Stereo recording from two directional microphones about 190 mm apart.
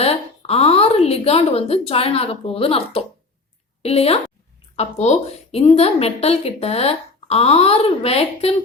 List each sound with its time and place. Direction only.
0.0 s a woman's voice: 30° left (ahead or behind)